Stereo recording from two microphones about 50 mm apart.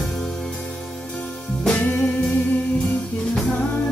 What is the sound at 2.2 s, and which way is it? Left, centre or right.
Music, left.